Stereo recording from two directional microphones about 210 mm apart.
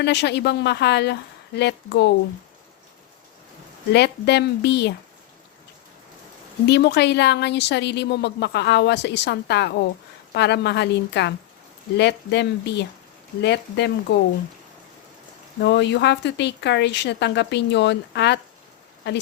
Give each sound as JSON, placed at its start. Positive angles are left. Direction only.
{"t": 0.0, "sound": "a woman's voice", "side_deg": 55}
{"t": 3.9, "sound": "a woman's voice", "side_deg": 55}
{"t": 6.7, "sound": "a woman's voice", "side_deg": 50}
{"t": 15.6, "sound": "speech", "side_deg": 55}